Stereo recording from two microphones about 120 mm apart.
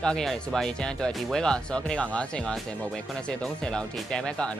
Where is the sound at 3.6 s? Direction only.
5° left (ahead or behind).